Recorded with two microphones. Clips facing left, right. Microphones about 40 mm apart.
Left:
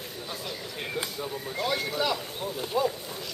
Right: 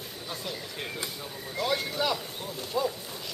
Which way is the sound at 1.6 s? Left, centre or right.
Centre.